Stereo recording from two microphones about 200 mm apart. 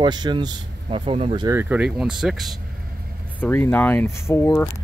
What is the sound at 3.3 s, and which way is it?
Speech, 10° left (ahead or behind).